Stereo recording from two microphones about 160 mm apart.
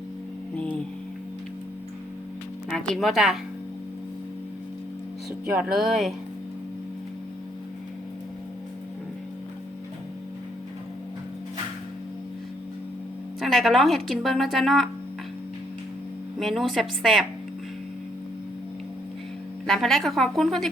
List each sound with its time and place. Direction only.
0.5 s music: 10° left (ahead or behind)
2.6 s speech: centre (ahead or behind)
5.7 s a woman's voice: centre (ahead or behind)
13.4 s a woman's voice: centre (ahead or behind)
16.4 s a woman's voice: centre (ahead or behind)
19.6 s a woman's voice: centre (ahead or behind)